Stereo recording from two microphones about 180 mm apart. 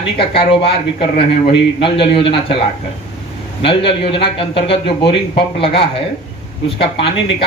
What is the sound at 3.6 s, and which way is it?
Speech, 30° left (ahead or behind).